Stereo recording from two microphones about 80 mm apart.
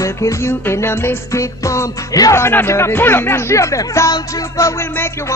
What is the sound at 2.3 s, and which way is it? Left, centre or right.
Music, left.